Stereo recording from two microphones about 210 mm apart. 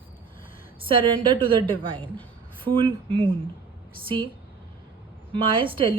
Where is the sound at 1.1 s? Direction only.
25° right (ahead or behind).